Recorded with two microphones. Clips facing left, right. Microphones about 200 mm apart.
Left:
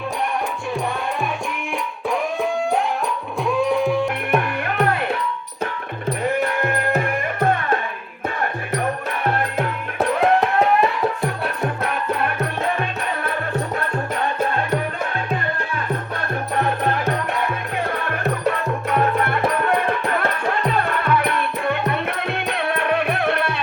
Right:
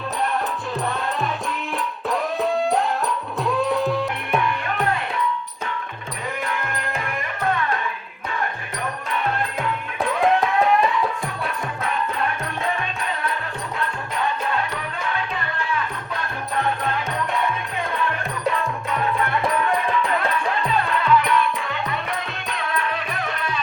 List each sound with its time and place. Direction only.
2.0 s music: centre (ahead or behind)
3.8 s music: 15° left (ahead or behind)
4.4 s music: 55° left (ahead or behind)
6.4 s music: 50° left (ahead or behind)
9.2 s music: 60° left (ahead or behind)
14.5 s music: 45° left (ahead or behind)
18.9 s music: 55° left (ahead or behind)